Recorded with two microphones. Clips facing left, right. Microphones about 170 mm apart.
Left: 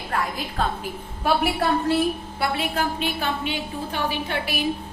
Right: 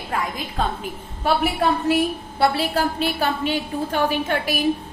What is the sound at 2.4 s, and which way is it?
A woman's voice, 35° right (ahead or behind).